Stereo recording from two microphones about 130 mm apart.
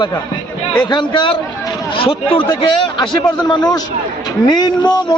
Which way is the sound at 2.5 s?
30° left (ahead or behind).